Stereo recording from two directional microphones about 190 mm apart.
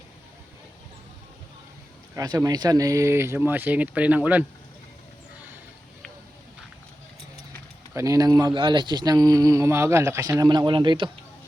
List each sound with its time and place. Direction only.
2.1 s speech: 20° right (ahead or behind)
7.9 s speech: 15° right (ahead or behind)